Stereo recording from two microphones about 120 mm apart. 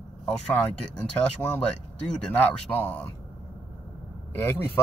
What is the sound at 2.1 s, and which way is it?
Speech, 5° left (ahead or behind).